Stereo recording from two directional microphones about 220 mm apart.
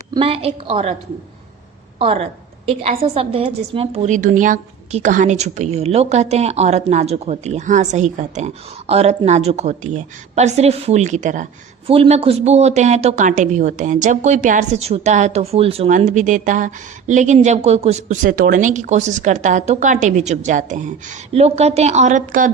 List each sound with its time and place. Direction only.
0.1 s a woman's voice: 25° right (ahead or behind)
2.0 s a woman's voice: 25° right (ahead or behind)